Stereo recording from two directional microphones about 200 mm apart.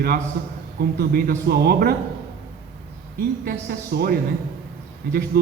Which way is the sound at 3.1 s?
50° right (ahead or behind).